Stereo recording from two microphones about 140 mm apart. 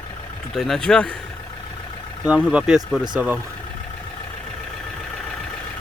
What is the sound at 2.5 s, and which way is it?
Speech, 5° right (ahead or behind).